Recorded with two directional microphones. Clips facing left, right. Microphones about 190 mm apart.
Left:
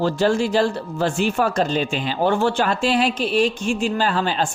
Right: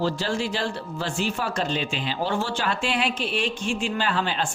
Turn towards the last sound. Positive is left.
turn(degrees=40)  # may be behind; listen again after turning